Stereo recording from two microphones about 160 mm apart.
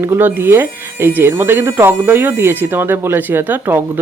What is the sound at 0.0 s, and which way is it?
Speech, 15° right (ahead or behind).